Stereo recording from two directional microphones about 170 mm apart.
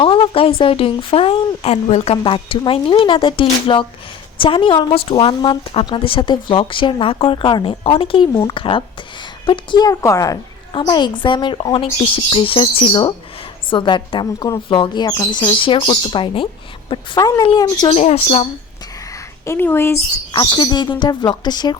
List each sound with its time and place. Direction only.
0.0 s a woman's voice: 30° left (ahead or behind)
17.9 s speech: 40° left (ahead or behind)
19.1 s a woman's voice: 15° left (ahead or behind)
20.3 s speech: 25° left (ahead or behind)